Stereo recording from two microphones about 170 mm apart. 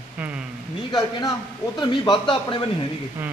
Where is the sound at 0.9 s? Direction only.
25° left (ahead or behind).